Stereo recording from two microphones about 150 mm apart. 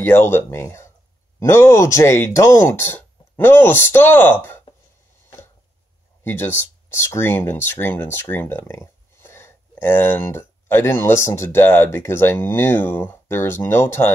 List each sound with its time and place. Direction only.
0.0 s speech: 15° left (ahead or behind)
6.2 s speech: 15° left (ahead or behind)